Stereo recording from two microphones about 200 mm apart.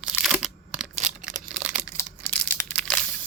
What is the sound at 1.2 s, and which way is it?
Crumpling, 40° right (ahead or behind).